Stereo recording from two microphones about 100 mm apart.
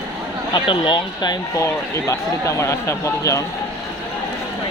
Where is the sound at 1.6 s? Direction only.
30° left (ahead or behind).